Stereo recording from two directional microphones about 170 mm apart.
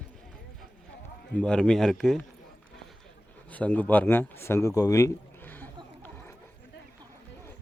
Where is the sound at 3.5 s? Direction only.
10° left (ahead or behind).